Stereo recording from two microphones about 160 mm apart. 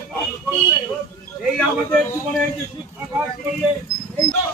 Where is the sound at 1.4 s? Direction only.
5° left (ahead or behind).